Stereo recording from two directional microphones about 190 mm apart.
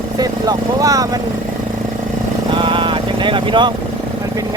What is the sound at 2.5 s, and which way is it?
Vehicle, 25° right (ahead or behind).